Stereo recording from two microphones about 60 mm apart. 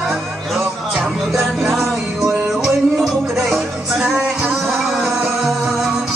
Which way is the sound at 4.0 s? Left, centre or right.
Centre.